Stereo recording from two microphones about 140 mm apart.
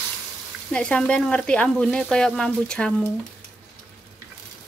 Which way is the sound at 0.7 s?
5° left (ahead or behind).